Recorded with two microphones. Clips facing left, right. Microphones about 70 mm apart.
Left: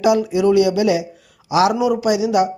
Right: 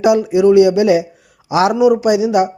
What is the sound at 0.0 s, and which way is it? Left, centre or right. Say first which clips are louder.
A man's voice: right 4 dB; right.